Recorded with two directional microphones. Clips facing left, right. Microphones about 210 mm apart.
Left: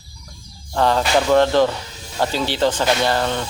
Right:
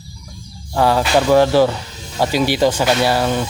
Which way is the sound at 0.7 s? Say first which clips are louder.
Right 2 dB; 10° right (ahead or behind).